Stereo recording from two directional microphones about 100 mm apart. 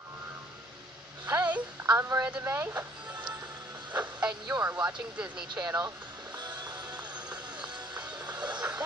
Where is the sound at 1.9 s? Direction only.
25° right (ahead or behind).